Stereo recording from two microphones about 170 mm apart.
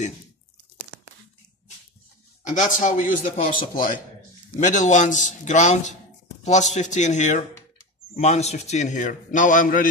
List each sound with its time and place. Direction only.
2.4 s a man's voice: 45° left (ahead or behind)
4.6 s a man's voice: 45° left (ahead or behind)